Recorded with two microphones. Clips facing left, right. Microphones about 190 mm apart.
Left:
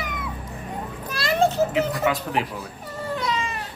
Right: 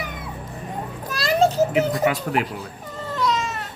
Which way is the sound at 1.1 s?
40° right (ahead or behind).